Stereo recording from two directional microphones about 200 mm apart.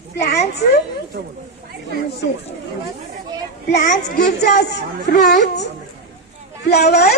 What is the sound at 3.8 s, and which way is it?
Speech, 40° left (ahead or behind).